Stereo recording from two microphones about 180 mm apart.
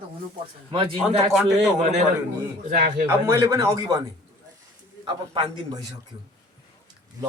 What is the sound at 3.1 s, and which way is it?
Speech, 15° right (ahead or behind).